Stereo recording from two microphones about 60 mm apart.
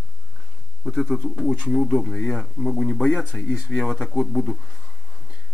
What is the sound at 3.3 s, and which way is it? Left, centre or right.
Speech, centre.